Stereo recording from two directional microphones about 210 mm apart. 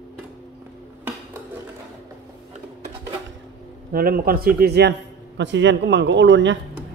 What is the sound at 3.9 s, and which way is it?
Speech, 45° right (ahead or behind).